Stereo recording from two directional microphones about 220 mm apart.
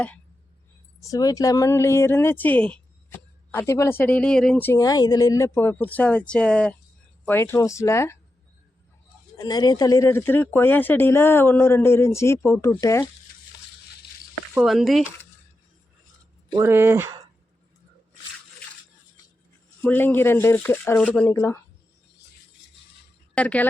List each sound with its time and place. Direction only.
1.0 s speech: 15° left (ahead or behind)
9.4 s speech: 20° left (ahead or behind)
13.3 s stir: 40° left (ahead or behind)
14.5 s speech: centre (ahead or behind)
16.5 s speech: 10° right (ahead or behind)
19.8 s speech: 10° left (ahead or behind)
23.3 s speech: 5° left (ahead or behind)